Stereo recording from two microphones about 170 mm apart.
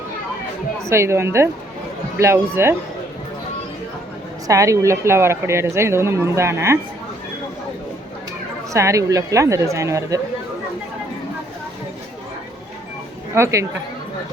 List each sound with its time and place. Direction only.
0.9 s a woman's voice: 15° right (ahead or behind)
4.4 s a woman's voice: 20° right (ahead or behind)
8.7 s a woman's voice: 20° right (ahead or behind)
13.3 s a woman's voice: 15° right (ahead or behind)